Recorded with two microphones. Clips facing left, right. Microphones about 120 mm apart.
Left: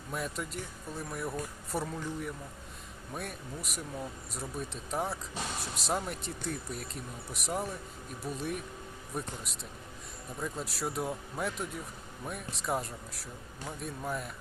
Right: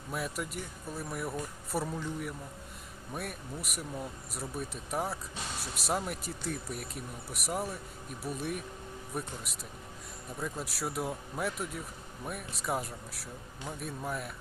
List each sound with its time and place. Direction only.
0.1 s speech: 5° right (ahead or behind)